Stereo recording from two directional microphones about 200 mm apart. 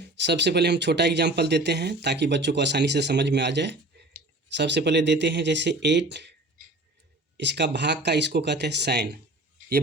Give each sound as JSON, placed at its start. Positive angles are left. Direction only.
{"t": 0.0, "sound": "speech", "side_deg": -60}
{"t": 7.3, "sound": "speech", "side_deg": -60}